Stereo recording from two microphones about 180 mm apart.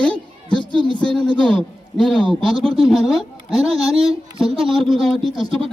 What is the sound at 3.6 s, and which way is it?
Speech, 30° right (ahead or behind).